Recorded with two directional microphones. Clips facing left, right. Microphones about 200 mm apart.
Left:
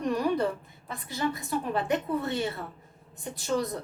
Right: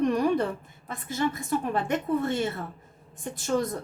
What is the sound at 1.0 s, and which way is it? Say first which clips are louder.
A woman's voice: right 3 dB; 50° right (ahead or behind).